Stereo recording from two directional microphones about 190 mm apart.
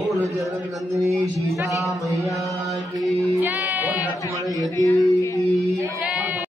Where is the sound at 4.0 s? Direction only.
20° left (ahead or behind).